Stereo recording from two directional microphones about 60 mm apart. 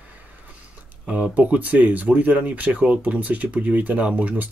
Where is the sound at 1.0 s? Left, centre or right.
Right.